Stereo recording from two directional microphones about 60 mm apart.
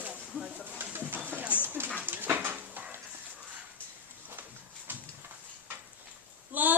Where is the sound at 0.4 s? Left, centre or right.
Right.